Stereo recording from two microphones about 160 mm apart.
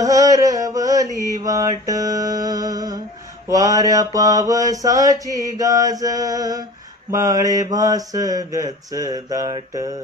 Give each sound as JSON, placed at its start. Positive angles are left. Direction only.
{"t": 0.0, "sound": "mantra", "side_deg": -20}